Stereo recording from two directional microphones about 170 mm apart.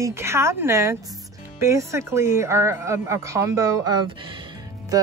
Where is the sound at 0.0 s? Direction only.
15° right (ahead or behind).